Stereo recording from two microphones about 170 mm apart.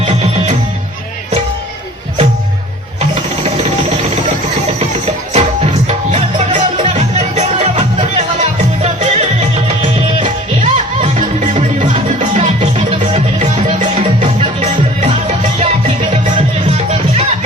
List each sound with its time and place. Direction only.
0.0 s music: 40° right (ahead or behind)
4.8 s music: 35° right (ahead or behind)